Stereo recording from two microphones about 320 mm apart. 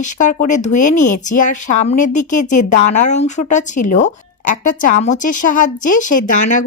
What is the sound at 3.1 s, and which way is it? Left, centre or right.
Speech, left.